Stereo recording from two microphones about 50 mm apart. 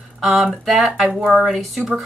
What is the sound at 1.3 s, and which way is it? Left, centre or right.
Speech, centre.